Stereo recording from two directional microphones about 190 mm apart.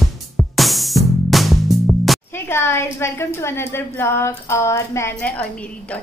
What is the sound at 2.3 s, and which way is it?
A woman's voice, 10° left (ahead or behind).